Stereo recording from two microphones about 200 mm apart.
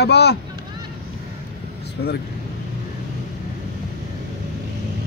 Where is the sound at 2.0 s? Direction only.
55° left (ahead or behind).